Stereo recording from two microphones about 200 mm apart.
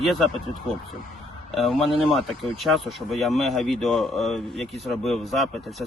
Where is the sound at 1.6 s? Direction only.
Centre (ahead or behind).